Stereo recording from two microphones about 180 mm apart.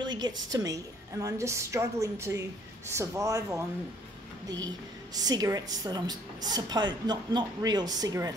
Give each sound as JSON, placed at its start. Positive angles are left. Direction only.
{"t": 0.0, "sound": "a woman's voice", "side_deg": -25}
{"t": 5.1, "sound": "a woman's voice", "side_deg": -20}